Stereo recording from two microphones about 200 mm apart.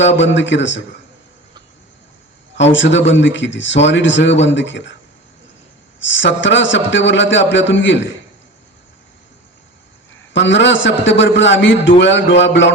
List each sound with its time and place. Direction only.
0.3 s a man's voice: 65° left (ahead or behind)
2.7 s a man's voice: 65° left (ahead or behind)
6.0 s a man's voice: 65° left (ahead or behind)
10.3 s a man's voice: 65° left (ahead or behind)